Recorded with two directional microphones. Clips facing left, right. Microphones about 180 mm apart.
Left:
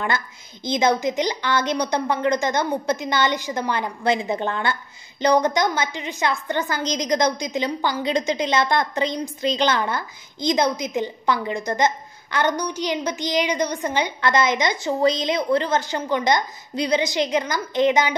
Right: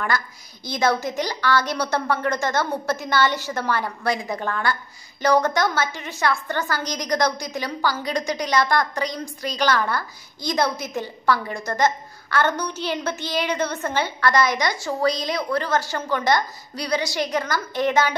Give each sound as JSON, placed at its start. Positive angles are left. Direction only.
{"t": 0.7, "sound": "a woman's voice", "side_deg": 20}